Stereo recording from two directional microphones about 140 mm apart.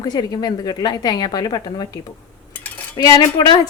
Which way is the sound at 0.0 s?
30° left (ahead or behind).